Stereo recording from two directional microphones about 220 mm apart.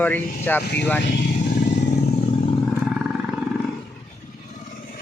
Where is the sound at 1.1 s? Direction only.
45° left (ahead or behind).